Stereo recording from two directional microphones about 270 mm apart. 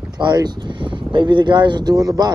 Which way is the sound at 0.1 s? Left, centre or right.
Centre.